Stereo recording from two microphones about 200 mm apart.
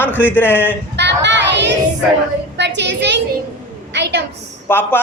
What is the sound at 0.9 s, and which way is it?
Child singing, 60° right (ahead or behind).